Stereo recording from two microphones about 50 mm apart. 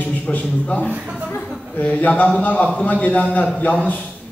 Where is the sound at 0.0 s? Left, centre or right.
Left.